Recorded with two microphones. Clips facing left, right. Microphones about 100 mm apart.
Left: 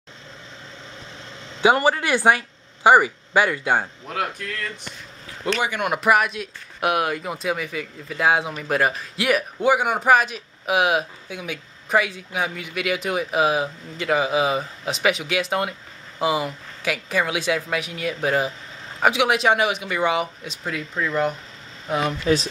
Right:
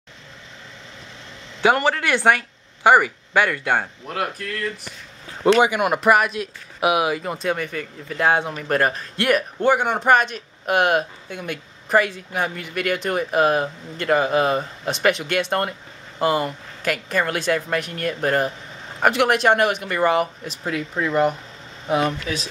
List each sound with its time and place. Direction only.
1.6 s speech: 10° left (ahead or behind)
5.4 s a man's voice: 20° right (ahead or behind)
5.8 s speech: centre (ahead or behind)